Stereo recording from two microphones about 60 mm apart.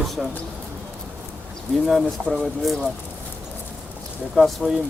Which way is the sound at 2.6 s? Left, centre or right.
Centre.